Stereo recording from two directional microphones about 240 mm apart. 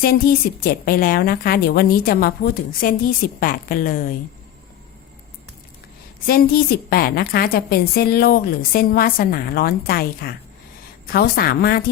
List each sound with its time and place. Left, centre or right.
0.0 s a woman's voice: left
6.2 s a woman's voice: left